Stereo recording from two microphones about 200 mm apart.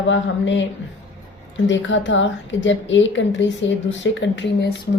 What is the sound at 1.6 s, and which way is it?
A woman's voice, 65° left (ahead or behind).